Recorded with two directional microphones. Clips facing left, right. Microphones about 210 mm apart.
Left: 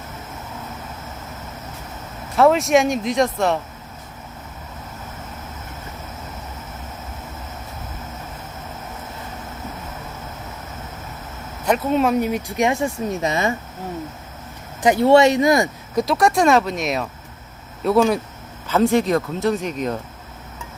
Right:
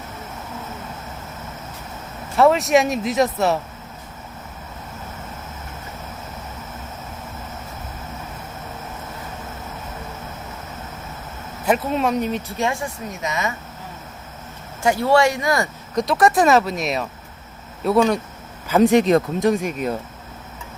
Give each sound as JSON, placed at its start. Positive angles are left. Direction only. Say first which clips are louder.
{"t": 2.3, "sound": "speech", "louder": "even", "side_deg": 0}
{"t": 11.6, "sound": "speech", "louder": "left 2 dB", "side_deg": 0}
{"t": 14.8, "sound": "speech", "louder": "left 4 dB", "side_deg": 20}
{"t": 16.0, "sound": "speech", "louder": "even", "side_deg": 0}
{"t": 18.7, "sound": "speech", "louder": "right 3 dB", "side_deg": -15}